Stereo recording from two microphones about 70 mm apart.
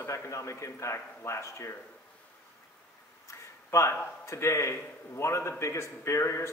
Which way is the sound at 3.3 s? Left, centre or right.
Left.